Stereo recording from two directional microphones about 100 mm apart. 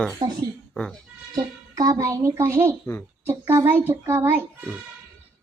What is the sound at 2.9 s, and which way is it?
Speech, 35° left (ahead or behind).